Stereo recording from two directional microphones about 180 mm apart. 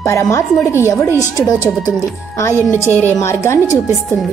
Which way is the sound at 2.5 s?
15° right (ahead or behind).